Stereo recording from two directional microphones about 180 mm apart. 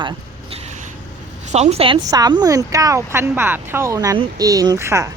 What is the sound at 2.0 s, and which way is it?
Speech, 20° right (ahead or behind).